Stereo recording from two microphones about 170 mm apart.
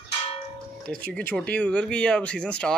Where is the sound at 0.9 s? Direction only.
5° left (ahead or behind).